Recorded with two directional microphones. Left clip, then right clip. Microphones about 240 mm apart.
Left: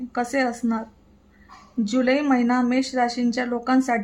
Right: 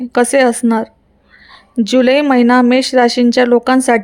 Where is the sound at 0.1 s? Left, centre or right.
Right.